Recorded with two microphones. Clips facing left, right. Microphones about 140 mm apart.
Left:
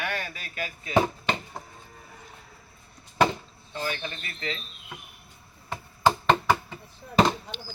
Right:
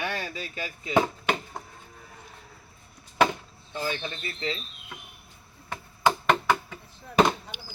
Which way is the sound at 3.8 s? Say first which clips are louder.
Right 1 dB; 25° right (ahead or behind).